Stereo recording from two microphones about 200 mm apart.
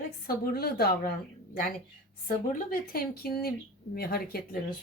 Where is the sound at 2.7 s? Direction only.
50° left (ahead or behind).